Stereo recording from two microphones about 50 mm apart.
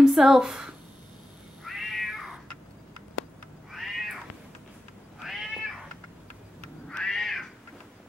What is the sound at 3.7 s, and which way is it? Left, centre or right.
Cat, centre.